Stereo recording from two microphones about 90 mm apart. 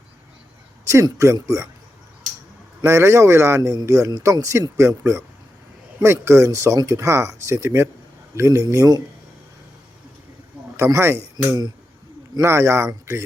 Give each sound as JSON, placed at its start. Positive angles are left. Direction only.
{"t": 1.2, "sound": "speech", "side_deg": -35}
{"t": 2.8, "sound": "speech", "side_deg": -30}
{"t": 10.8, "sound": "speech", "side_deg": -30}